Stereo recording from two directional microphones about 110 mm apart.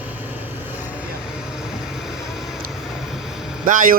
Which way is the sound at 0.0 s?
15° right (ahead or behind).